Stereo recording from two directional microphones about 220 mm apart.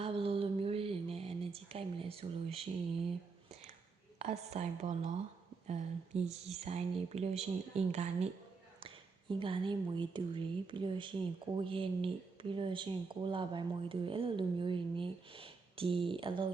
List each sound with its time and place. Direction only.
0.0 s a sound: 25° right (ahead or behind)
4.2 s a woman's voice: 30° right (ahead or behind)
9.3 s speech: 25° right (ahead or behind)